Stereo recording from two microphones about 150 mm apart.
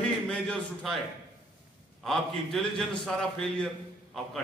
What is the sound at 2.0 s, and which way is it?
A man's voice, centre (ahead or behind).